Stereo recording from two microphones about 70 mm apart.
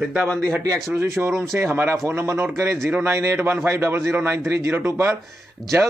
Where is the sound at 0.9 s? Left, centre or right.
Right.